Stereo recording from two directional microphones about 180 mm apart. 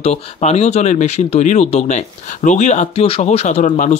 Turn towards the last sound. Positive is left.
turn(degrees=40)  # may be behind; listen again after turning